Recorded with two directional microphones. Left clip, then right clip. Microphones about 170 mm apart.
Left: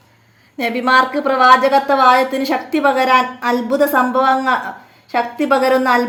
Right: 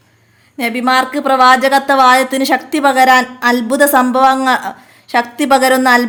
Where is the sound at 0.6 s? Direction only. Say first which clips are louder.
Even; 30° right (ahead or behind).